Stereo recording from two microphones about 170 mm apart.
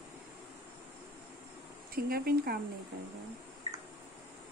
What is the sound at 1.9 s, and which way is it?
Speech, 60° right (ahead or behind).